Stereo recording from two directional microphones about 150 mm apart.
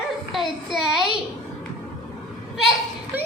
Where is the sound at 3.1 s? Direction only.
15° right (ahead or behind).